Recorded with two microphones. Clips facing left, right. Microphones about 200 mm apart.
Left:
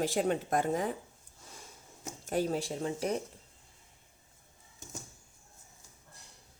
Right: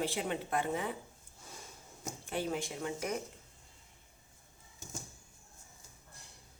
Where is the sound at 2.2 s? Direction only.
40° left (ahead or behind).